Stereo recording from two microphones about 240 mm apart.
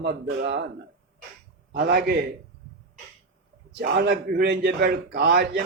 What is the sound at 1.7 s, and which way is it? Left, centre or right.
Speech, right.